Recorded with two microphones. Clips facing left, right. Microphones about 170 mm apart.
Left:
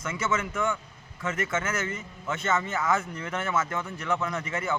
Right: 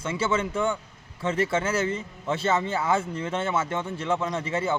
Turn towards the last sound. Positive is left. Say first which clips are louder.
# right 4 dB
turn(degrees=-30)  # may be behind; listen again after turning